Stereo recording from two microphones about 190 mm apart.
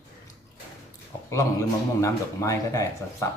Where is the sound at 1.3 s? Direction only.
15° left (ahead or behind).